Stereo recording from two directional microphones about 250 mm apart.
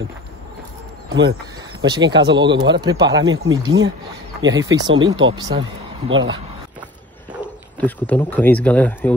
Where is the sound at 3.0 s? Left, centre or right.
Right.